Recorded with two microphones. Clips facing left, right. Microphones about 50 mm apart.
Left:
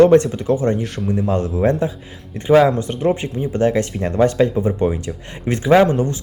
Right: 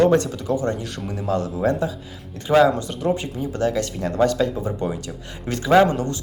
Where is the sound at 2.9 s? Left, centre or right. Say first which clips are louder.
Left 4 dB; left.